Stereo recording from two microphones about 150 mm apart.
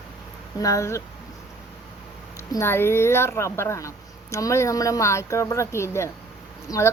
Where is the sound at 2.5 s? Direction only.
15° left (ahead or behind).